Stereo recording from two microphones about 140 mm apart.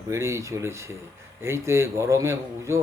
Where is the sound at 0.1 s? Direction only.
20° right (ahead or behind).